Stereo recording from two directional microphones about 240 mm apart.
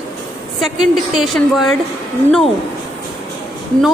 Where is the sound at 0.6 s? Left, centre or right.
Centre.